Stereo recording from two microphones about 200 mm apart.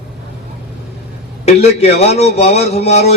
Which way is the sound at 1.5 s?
35° left (ahead or behind).